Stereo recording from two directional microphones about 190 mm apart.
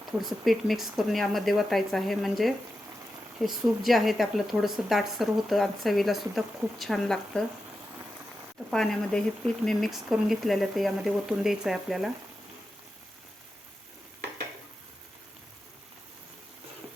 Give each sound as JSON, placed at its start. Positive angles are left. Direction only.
{"t": 0.2, "sound": "speech", "side_deg": 0}
{"t": 8.7, "sound": "speech", "side_deg": 5}